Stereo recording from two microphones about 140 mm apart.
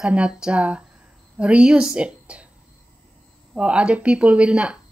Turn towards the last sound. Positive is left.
turn(degrees=-5)  # may be behind; listen again after turning